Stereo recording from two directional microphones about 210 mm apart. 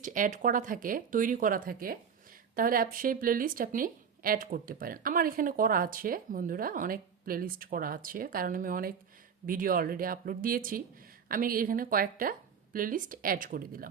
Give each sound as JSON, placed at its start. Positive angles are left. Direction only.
{"t": 0.0, "sound": "speech", "side_deg": -40}